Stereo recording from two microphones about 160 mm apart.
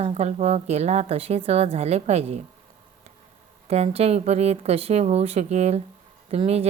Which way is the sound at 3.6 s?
40° right (ahead or behind).